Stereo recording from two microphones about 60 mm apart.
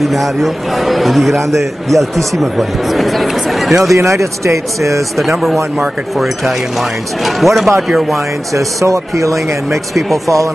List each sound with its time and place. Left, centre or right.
0.0 s a man's voice: centre
3.9 s speech: right
5.8 s a man's voice: centre
8.5 s speech: right
9.7 s a man's voice: centre
10.1 s speech: right